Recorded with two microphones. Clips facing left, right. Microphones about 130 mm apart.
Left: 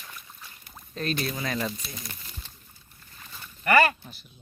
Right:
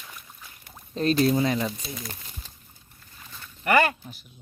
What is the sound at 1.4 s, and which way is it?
Speech, 20° right (ahead or behind).